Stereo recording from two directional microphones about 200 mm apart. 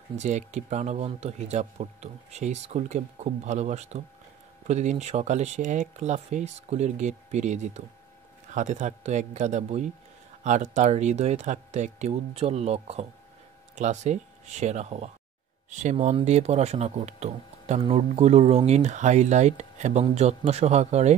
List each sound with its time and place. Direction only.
0.1 s speech: 35° right (ahead or behind)